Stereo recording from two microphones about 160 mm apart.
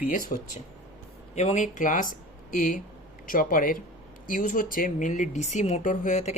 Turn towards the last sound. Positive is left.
turn(degrees=50)  # may be behind; listen again after turning